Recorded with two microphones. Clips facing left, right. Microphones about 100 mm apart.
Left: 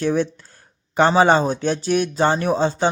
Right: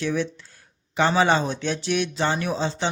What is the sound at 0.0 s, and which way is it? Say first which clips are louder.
Speech: left 5 dB; 45° left (ahead or behind).